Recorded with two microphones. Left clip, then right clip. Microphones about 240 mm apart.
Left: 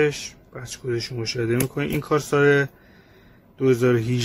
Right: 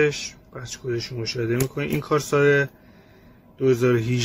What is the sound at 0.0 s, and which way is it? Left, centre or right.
Speech, centre.